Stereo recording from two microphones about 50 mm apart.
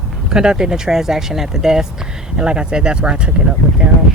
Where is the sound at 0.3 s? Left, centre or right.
Centre.